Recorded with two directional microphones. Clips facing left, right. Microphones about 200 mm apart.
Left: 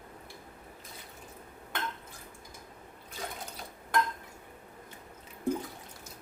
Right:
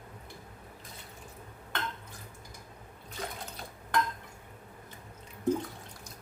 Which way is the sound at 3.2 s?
Centre (ahead or behind).